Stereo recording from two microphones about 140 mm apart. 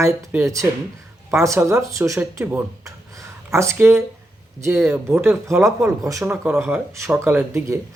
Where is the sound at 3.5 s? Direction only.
20° right (ahead or behind).